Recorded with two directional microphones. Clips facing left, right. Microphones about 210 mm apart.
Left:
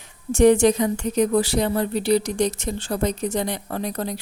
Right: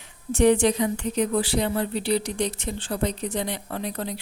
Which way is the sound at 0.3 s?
45° left (ahead or behind).